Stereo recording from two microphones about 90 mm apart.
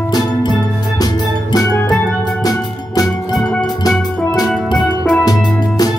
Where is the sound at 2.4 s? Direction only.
45° left (ahead or behind).